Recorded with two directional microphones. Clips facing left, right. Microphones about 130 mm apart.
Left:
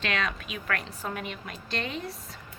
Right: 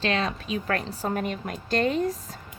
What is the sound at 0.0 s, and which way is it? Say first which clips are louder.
A woman's voice: right 4 dB; 35° right (ahead or behind).